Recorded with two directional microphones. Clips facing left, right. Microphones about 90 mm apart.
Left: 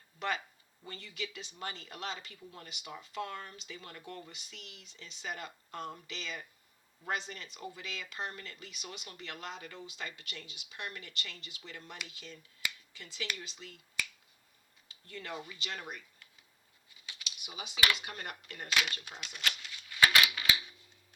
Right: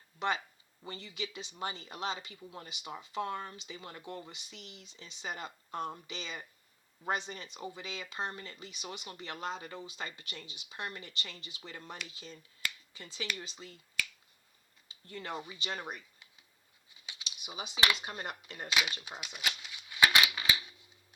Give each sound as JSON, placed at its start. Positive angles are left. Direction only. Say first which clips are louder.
{"t": 0.2, "sound": "speech", "louder": "right 2 dB", "side_deg": -25}
{"t": 15.0, "sound": "speech", "louder": "right 2 dB", "side_deg": -30}
{"t": 17.1, "sound": "speech", "louder": "right 1 dB", "side_deg": -20}
{"t": 18.7, "sound": "a sound", "louder": "even", "side_deg": -10}